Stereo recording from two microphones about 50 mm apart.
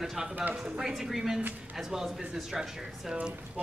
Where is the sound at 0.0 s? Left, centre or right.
Centre.